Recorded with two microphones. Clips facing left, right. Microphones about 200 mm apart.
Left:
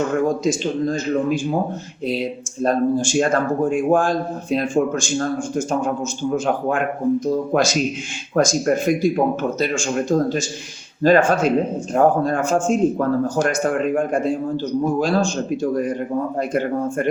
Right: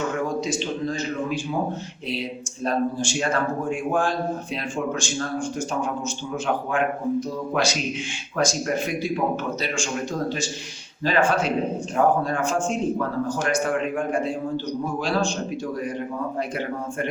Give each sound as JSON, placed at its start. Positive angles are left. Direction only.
{"t": 0.3, "sound": "speech", "side_deg": 45}
{"t": 2.6, "sound": "speech", "side_deg": 45}